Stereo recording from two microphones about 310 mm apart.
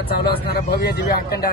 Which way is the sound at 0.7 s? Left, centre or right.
Left.